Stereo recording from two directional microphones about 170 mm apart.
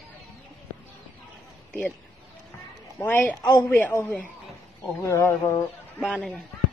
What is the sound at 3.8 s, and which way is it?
A woman's voice, 10° left (ahead or behind).